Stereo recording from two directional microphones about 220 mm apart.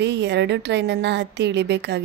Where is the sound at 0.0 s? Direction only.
50° right (ahead or behind).